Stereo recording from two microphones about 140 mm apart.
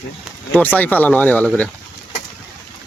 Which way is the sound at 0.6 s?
10° left (ahead or behind).